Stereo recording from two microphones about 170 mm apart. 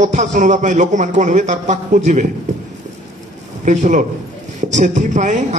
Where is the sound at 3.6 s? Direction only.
45° right (ahead or behind).